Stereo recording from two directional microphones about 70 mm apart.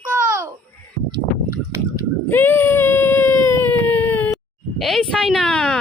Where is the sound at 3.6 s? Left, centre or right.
Left.